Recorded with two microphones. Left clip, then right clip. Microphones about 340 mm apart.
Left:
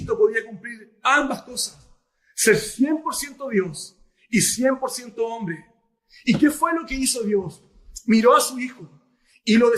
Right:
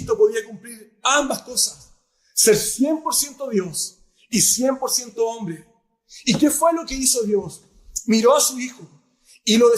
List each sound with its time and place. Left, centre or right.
0.1 s a man's voice: centre